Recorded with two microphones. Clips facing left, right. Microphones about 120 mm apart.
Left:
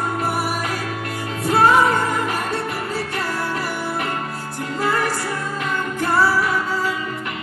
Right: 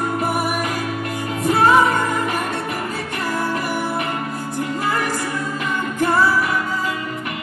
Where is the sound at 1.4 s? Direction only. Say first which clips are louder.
Even; 15° right (ahead or behind).